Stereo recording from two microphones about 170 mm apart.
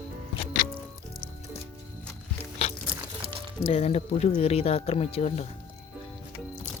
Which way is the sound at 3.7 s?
35° left (ahead or behind).